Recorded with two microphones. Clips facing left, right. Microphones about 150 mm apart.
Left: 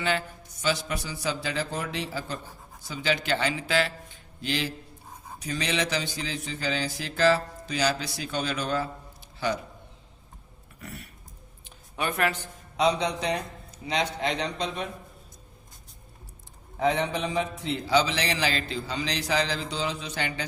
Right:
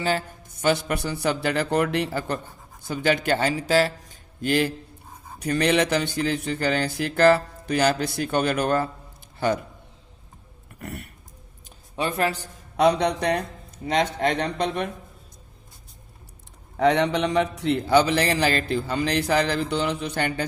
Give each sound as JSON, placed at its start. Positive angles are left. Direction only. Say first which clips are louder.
{"t": 0.0, "sound": "a man's voice", "louder": "right 3 dB", "side_deg": -40}
{"t": 10.8, "sound": "speech", "louder": "right 6 dB", "side_deg": -55}
{"t": 11.9, "sound": "speech", "louder": "right 3 dB", "side_deg": -30}
{"t": 12.7, "sound": "a man's voice", "louder": "right 5 dB", "side_deg": -60}
{"t": 16.7, "sound": "a man's voice", "louder": "right 6 dB", "side_deg": -70}